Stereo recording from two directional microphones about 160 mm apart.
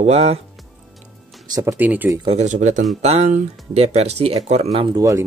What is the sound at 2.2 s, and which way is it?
Speech, 45° right (ahead or behind).